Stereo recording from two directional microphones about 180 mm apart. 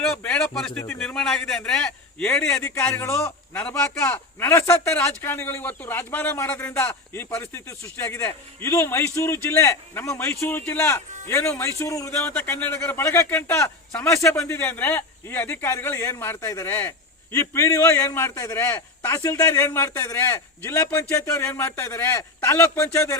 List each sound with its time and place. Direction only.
0.0 s a man's voice: 5° left (ahead or behind)
12.2 s a man's voice: 5° left (ahead or behind)